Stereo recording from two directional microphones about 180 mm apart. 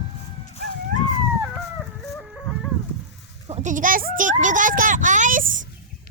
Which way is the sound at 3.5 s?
45° right (ahead or behind).